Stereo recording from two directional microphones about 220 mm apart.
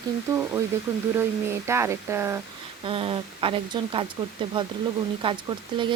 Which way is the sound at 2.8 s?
25° right (ahead or behind).